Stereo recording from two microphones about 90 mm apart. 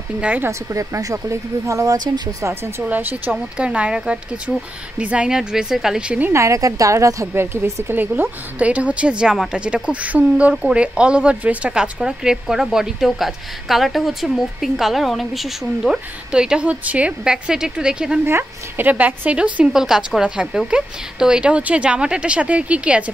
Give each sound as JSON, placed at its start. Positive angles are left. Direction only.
{"t": 0.2, "sound": "a woman's voice", "side_deg": -15}
{"t": 0.5, "sound": "a woman's voice", "side_deg": -35}
{"t": 2.8, "sound": "a woman's voice", "side_deg": -20}
{"t": 6.3, "sound": "a woman's voice", "side_deg": -35}
{"t": 18.2, "sound": "a woman's voice", "side_deg": -25}